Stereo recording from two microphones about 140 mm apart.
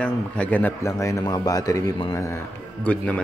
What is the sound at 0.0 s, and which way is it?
A man's voice, 10° left (ahead or behind).